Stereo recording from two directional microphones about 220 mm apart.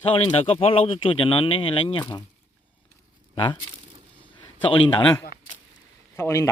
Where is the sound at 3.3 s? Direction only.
20° left (ahead or behind).